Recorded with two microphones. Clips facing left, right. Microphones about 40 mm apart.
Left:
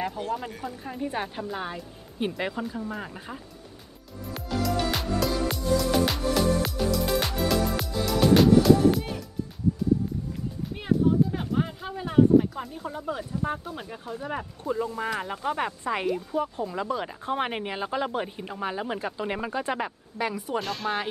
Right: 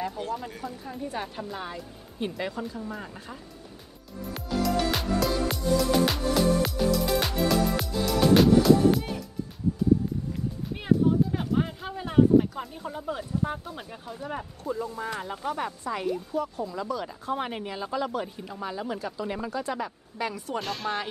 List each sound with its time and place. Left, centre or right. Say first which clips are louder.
0.5 s speech: left 1 dB; centre
0.8 s speech: left 4 dB; left
4.3 s music: right 1 dB; centre
10.8 s a sound: even; centre
13.4 s speech: left 1 dB; centre
14.3 s speech: left 2 dB; left
20.2 s speech: left 2 dB; centre
20.5 s speech: left 1 dB; centre